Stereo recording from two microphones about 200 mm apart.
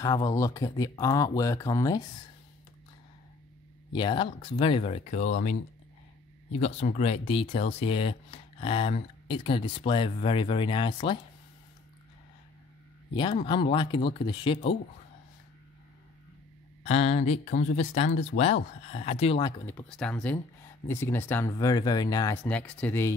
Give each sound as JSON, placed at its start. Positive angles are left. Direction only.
{"t": 0.0, "sound": "speech", "side_deg": 15}
{"t": 3.9, "sound": "speech", "side_deg": 25}
{"t": 6.6, "sound": "speech", "side_deg": 30}
{"t": 13.1, "sound": "speech", "side_deg": 25}
{"t": 16.8, "sound": "speech", "side_deg": 35}
{"t": 19.6, "sound": "speech", "side_deg": 5}